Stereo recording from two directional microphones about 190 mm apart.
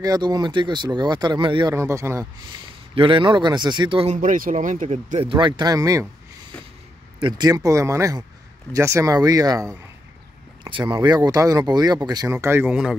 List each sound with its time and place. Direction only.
0.0 s speech: 20° right (ahead or behind)
1.8 s speech: 15° right (ahead or behind)
2.9 s speech: 25° right (ahead or behind)
4.2 s speech: 45° right (ahead or behind); by 6.0 s 20° right (ahead or behind)
7.2 s speech: 20° right (ahead or behind)